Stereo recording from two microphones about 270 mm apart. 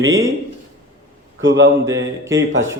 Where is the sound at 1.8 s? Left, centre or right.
Centre.